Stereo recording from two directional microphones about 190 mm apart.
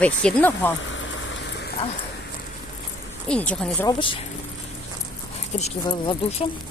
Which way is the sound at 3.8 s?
25° left (ahead or behind).